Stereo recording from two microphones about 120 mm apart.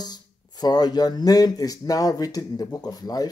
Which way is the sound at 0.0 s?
35° left (ahead or behind).